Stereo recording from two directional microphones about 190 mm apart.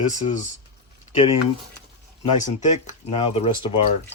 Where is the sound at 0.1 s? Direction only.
40° left (ahead or behind).